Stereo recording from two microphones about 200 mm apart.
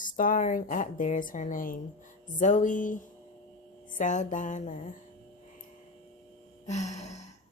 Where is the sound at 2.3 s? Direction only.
40° left (ahead or behind).